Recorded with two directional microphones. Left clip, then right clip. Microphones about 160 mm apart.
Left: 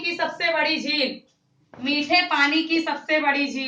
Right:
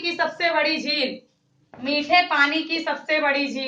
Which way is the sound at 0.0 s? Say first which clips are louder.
Right 1 dB; 40° right (ahead or behind).